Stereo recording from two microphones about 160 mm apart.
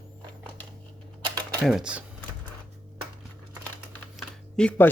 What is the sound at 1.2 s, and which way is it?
Typing, 25° right (ahead or behind).